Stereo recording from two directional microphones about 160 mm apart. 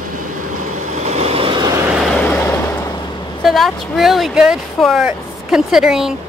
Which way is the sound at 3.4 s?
Centre (ahead or behind).